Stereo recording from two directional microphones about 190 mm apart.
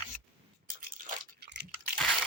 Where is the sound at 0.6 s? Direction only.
50° right (ahead or behind).